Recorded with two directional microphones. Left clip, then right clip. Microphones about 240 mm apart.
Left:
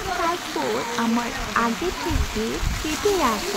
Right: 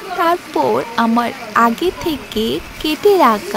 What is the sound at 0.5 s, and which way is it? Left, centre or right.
A woman's voice, centre.